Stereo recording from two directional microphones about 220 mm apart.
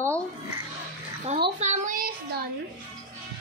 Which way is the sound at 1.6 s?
35° right (ahead or behind).